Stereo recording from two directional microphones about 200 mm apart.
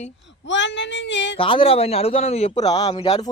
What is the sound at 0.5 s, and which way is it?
Child singing, 65° left (ahead or behind).